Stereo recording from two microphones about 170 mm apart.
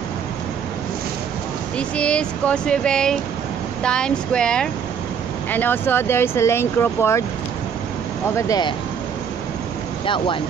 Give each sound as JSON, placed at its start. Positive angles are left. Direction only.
{"t": 1.8, "sound": "speech", "side_deg": 5}
{"t": 8.4, "sound": "speech", "side_deg": 20}
{"t": 10.0, "sound": "speech", "side_deg": 30}